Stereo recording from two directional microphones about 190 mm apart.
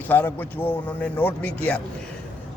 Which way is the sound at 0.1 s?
10° left (ahead or behind).